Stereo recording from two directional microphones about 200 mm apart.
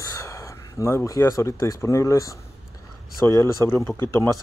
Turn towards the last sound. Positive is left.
turn(degrees=10)  # may be behind; listen again after turning